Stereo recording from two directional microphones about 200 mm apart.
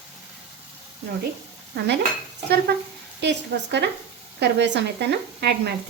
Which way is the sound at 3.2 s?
60° right (ahead or behind).